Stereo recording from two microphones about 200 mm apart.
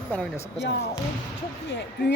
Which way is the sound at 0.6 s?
60° left (ahead or behind).